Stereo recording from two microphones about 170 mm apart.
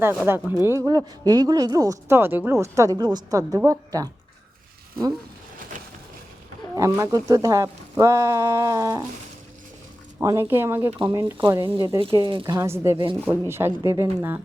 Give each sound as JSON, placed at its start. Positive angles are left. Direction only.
{"t": 0.0, "sound": "speech", "side_deg": -15}
{"t": 6.7, "sound": "speech", "side_deg": -15}
{"t": 10.2, "sound": "speech", "side_deg": -15}